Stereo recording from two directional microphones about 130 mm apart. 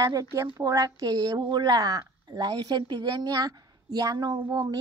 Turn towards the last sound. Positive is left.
turn(degrees=-30)  # may be behind; listen again after turning